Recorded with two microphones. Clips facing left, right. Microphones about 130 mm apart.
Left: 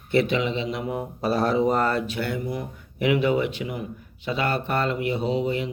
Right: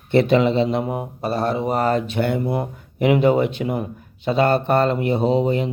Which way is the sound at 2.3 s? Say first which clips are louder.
Right 7 dB; 60° right (ahead or behind).